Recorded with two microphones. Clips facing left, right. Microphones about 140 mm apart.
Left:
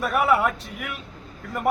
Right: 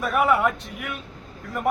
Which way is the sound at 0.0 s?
Centre (ahead or behind).